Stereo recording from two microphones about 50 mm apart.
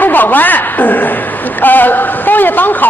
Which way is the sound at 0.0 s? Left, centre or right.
Left.